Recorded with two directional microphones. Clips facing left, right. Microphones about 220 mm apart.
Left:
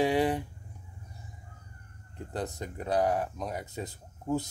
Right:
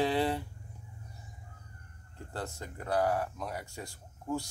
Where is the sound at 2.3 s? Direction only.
20° left (ahead or behind).